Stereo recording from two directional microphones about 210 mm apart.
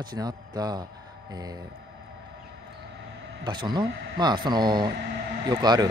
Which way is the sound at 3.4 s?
20° right (ahead or behind).